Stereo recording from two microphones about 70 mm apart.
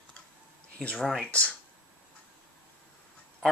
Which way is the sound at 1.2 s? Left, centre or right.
Centre.